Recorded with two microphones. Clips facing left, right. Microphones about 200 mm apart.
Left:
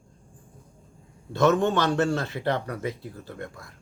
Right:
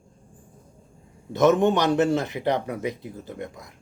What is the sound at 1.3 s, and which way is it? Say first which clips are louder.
Speech: right 3 dB; 20° right (ahead or behind).